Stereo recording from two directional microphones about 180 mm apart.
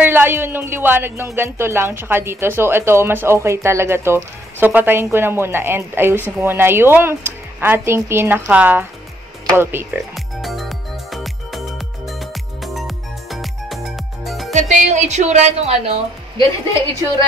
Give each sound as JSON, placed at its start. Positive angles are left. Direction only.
{"t": 0.0, "sound": "speech", "side_deg": -10}
{"t": 10.1, "sound": "music", "side_deg": 0}
{"t": 14.5, "sound": "a woman's voice", "side_deg": -40}